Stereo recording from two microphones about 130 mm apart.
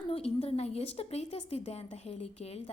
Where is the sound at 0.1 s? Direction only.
50° left (ahead or behind).